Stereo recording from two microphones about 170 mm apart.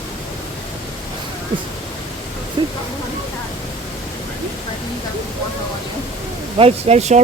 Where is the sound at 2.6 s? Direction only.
25° right (ahead or behind).